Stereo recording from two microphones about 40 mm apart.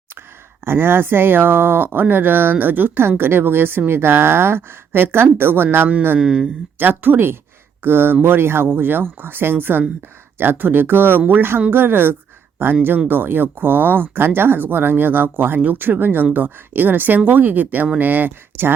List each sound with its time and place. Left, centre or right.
0.6 s speech: right
3.0 s a woman's voice: right
6.1 s speech: right
6.7 s speech: right
7.9 s a woman's voice: right
13.1 s speech: right